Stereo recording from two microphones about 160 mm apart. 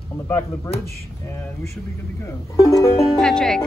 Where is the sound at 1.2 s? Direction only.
15° left (ahead or behind).